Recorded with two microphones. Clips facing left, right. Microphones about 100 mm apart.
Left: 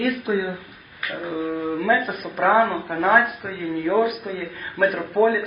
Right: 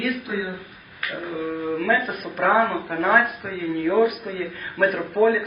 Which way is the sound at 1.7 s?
15° left (ahead or behind).